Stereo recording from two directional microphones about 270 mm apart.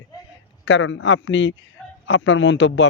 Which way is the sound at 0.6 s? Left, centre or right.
Left.